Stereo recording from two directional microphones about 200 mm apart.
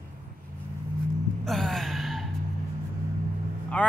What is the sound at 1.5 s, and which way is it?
Gasp, centre (ahead or behind).